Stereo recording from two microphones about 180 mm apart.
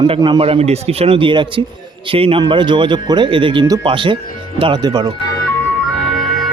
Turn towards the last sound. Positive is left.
turn(degrees=-30)  # may be behind; listen again after turning